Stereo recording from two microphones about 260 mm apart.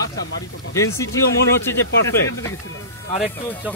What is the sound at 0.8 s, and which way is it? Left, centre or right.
Speech, centre.